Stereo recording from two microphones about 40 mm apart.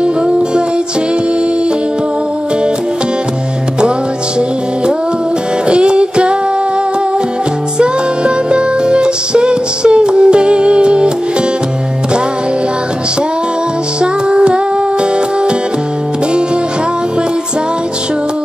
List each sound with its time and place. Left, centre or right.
5.7 s music: right
7.8 s music: right
14.3 s humming: right